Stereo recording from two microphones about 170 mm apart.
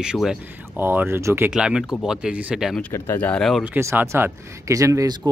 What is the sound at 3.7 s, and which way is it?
Speech, 15° right (ahead or behind).